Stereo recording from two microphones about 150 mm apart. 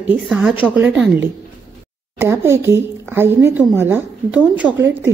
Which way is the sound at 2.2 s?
15° right (ahead or behind).